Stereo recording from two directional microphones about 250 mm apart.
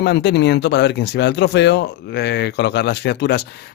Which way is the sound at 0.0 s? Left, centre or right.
Left.